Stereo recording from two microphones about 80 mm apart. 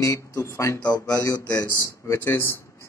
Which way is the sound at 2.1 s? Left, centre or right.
Left.